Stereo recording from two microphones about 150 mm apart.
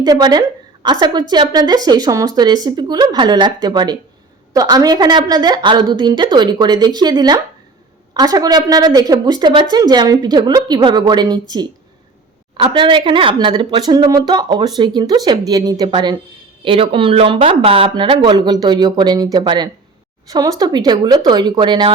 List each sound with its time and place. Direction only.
0.0 s a woman's voice: 25° right (ahead or behind)